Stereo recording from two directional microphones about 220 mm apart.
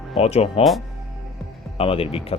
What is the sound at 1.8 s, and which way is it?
Speech, 25° left (ahead or behind).